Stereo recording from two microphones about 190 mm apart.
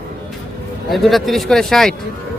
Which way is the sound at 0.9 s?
Centre (ahead or behind).